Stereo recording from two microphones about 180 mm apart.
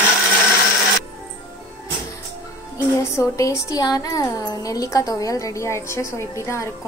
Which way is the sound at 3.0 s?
15° left (ahead or behind).